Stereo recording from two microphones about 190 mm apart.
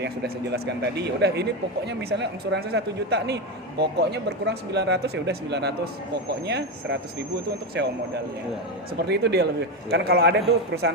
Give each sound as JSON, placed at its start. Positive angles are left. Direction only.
{"t": 0.0, "sound": "speech", "side_deg": -60}
{"t": 9.0, "sound": "speech", "side_deg": -60}